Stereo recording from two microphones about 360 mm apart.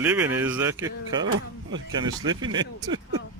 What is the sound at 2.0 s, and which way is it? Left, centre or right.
Speech, centre.